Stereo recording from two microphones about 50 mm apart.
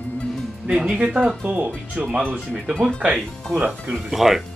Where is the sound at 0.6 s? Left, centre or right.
Right.